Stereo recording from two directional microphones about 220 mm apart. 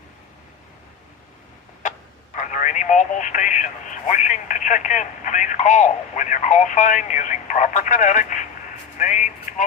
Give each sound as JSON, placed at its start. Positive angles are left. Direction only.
{"t": 1.8, "sound": "radio", "side_deg": 35}
{"t": 2.3, "sound": "speech", "side_deg": 35}